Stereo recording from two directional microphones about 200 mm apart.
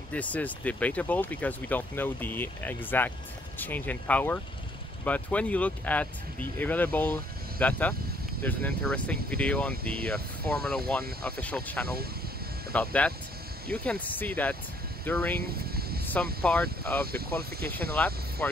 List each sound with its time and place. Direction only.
0.1 s speech: 5° left (ahead or behind)
15.4 s a sound: 50° right (ahead or behind)
16.5 s speech: 5° left (ahead or behind)
17.1 s speech: 50° right (ahead or behind)
17.9 s speech: 5° left (ahead or behind)